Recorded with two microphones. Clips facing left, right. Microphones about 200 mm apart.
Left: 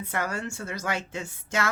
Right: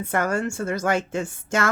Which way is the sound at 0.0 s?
50° right (ahead or behind).